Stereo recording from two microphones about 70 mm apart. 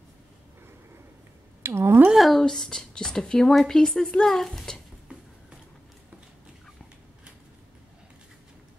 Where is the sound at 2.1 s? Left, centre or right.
Centre.